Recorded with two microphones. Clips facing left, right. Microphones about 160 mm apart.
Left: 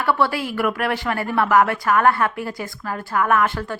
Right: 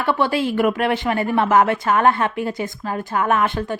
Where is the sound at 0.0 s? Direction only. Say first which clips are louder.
Right 1 dB; 20° right (ahead or behind).